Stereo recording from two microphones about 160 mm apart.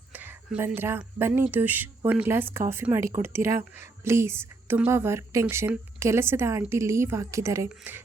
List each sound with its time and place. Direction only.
0.1 s speech: 10° right (ahead or behind)